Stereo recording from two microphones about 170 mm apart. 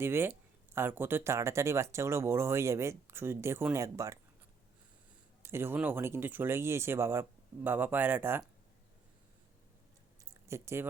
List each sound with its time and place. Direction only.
0.0 s speech: 15° right (ahead or behind)
5.4 s speech: 15° right (ahead or behind)
10.5 s speech: 15° right (ahead or behind)